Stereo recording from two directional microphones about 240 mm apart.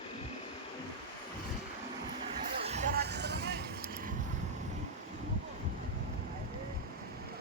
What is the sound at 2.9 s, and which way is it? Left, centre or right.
Vehicle, right.